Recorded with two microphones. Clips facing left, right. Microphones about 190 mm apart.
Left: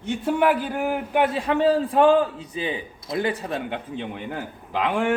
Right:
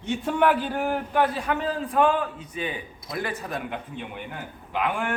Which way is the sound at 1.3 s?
30° left (ahead or behind).